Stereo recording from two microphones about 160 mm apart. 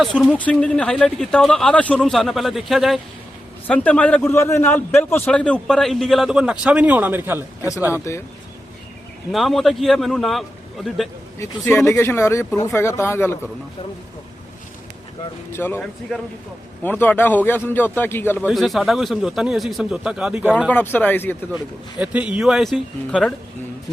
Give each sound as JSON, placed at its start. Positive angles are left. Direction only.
{"t": 0.0, "sound": "a man's voice", "side_deg": 0}
{"t": 9.3, "sound": "a man's voice", "side_deg": 0}
{"t": 11.3, "sound": "speech", "side_deg": 15}
{"t": 15.5, "sound": "speech", "side_deg": 15}
{"t": 18.4, "sound": "a man's voice", "side_deg": 0}
{"t": 20.7, "sound": "speech", "side_deg": 10}
{"t": 21.9, "sound": "a man's voice", "side_deg": -10}